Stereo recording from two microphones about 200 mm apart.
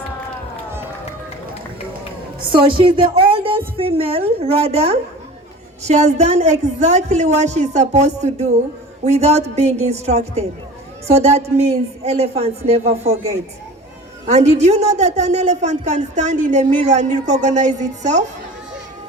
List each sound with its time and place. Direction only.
2.5 s a woman's voice: 25° right (ahead or behind)